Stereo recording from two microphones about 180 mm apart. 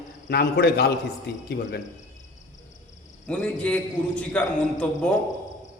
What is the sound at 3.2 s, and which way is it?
A man's voice, 5° left (ahead or behind).